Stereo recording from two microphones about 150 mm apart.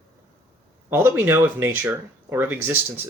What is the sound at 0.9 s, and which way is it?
Speech, 15° right (ahead or behind).